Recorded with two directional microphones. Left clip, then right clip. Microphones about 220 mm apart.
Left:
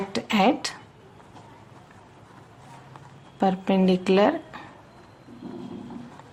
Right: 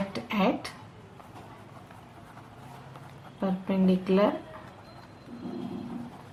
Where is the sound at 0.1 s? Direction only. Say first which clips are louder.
Left 8 dB; 45° left (ahead or behind).